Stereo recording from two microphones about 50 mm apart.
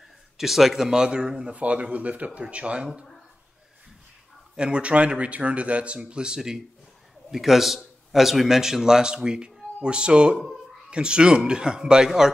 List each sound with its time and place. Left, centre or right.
0.4 s a man's voice: centre
0.8 s a man's voice: centre
1.5 s a man's voice: right
4.6 s a man's voice: centre